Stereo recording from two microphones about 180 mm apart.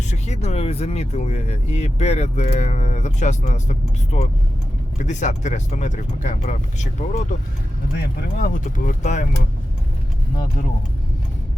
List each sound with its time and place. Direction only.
0.1 s speech: 40° left (ahead or behind)
8.4 s speech: 50° left (ahead or behind)